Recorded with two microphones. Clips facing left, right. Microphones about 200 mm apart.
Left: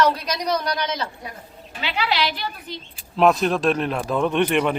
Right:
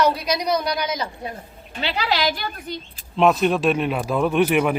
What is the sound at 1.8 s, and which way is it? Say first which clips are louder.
Speech: right 1 dB; 40° right (ahead or behind).